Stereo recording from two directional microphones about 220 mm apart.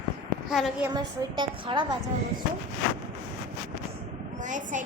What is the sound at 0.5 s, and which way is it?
Speech, centre (ahead or behind).